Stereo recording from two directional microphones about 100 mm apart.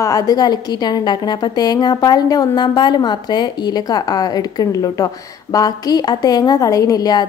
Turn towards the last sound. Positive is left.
turn(degrees=40)  # may be behind; listen again after turning